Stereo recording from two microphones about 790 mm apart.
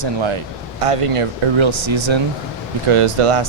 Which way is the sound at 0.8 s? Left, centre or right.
Right.